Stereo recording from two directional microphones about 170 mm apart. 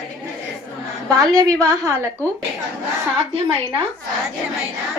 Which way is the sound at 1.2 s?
20° right (ahead or behind).